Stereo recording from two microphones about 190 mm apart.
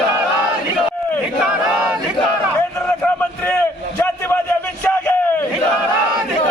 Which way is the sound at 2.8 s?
10° left (ahead or behind).